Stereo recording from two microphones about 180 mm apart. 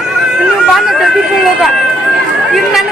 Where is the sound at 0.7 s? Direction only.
Centre (ahead or behind).